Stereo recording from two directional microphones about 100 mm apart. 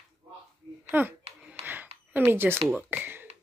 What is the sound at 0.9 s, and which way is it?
Speech, 20° right (ahead or behind).